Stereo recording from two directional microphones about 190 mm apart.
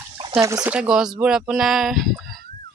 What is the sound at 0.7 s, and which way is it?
Speech, 5° right (ahead or behind).